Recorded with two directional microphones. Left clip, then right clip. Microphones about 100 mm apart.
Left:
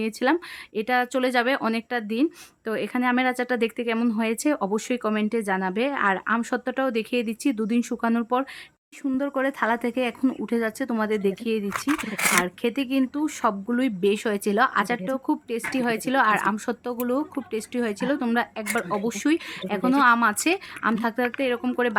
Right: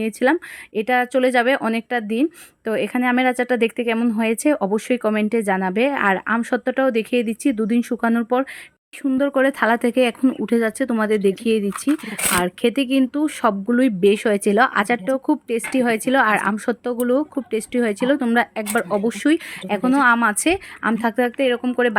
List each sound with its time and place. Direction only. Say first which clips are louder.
0.0 s speech: right 5 dB; 20° right (ahead or behind)
9.0 s a woman's voice: right 7 dB; 45° right (ahead or behind); by 21.9 s 20° right (ahead or behind)